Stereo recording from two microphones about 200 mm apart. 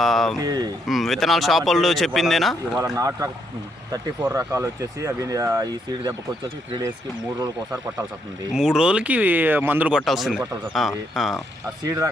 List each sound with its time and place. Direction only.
0.0 s speech: centre (ahead or behind)
0.3 s speech: 20° right (ahead or behind)
0.9 s speech: centre (ahead or behind)
2.7 s speech: 15° right (ahead or behind)
7.3 s speech: 20° right (ahead or behind)
8.5 s speech: 5° right (ahead or behind)
11.9 s speech: 15° right (ahead or behind)